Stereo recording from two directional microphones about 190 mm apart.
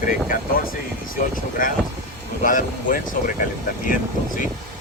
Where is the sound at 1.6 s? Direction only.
45° left (ahead or behind).